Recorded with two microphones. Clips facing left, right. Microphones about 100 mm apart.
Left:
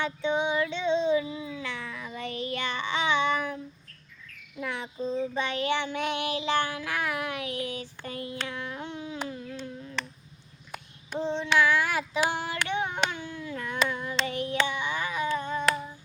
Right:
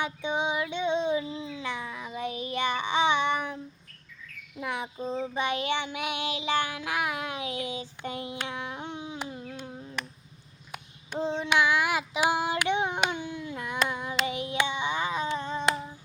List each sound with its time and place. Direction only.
0.0 s child singing: 15° right (ahead or behind)
4.6 s cricket: 15° right (ahead or behind)
5.2 s child singing: 15° right (ahead or behind)
11.2 s child singing: 15° right (ahead or behind)
14.2 s humming: 15° right (ahead or behind)